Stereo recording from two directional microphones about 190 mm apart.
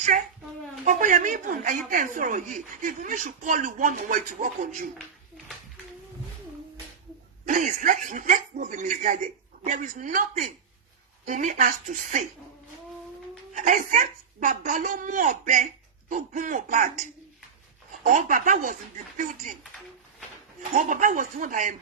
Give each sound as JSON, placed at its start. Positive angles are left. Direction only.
{"t": 0.1, "sound": "a child's voice", "side_deg": -45}
{"t": 7.4, "sound": "speech", "side_deg": -40}
{"t": 13.5, "sound": "speech", "side_deg": -40}
{"t": 18.0, "sound": "speech", "side_deg": -40}
{"t": 20.6, "sound": "speech", "side_deg": -45}